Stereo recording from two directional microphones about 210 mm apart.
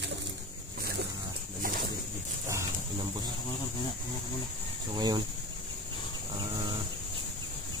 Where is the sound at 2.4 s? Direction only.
15° right (ahead or behind).